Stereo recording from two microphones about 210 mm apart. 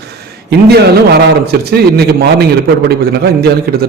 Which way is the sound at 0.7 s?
50° right (ahead or behind).